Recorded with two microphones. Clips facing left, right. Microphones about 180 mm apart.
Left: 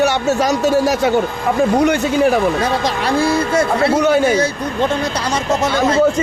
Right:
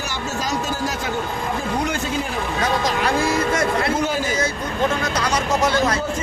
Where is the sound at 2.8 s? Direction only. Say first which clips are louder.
Left 4 dB; 30° left (ahead or behind).